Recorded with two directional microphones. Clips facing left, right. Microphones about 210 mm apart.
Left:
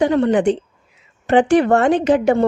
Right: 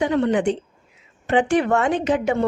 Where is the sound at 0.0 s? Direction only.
35° left (ahead or behind).